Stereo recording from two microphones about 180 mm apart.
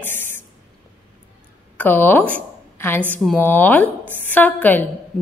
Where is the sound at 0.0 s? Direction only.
10° left (ahead or behind).